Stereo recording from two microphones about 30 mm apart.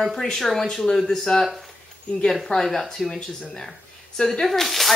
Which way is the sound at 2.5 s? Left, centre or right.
Left.